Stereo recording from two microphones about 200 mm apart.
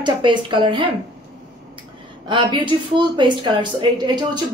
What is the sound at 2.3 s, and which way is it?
A woman's voice, 25° right (ahead or behind).